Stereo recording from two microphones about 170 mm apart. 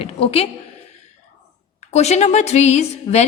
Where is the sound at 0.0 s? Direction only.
35° left (ahead or behind).